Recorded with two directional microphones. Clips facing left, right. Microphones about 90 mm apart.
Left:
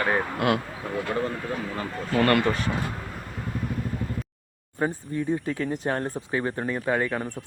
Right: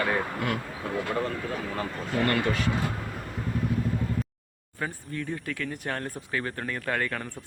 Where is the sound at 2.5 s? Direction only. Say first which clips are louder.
Left 2 dB; 35° left (ahead or behind).